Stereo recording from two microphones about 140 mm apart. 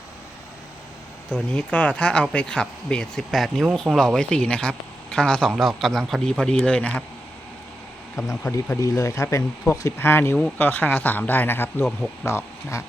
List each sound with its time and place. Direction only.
1.3 s a man's voice: 10° left (ahead or behind)
8.1 s speech: 20° left (ahead or behind)